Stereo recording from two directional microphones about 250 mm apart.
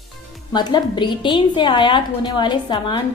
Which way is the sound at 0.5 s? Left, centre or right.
Centre.